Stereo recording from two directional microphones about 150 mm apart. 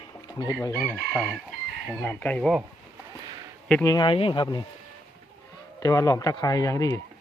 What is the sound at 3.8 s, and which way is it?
Speech, 30° left (ahead or behind).